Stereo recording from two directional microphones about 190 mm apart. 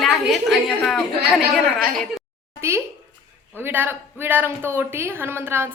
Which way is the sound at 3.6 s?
10° right (ahead or behind).